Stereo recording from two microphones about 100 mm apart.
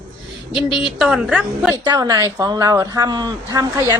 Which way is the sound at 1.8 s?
40° right (ahead or behind).